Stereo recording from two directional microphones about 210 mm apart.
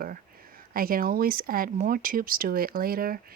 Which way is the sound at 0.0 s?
45° right (ahead or behind).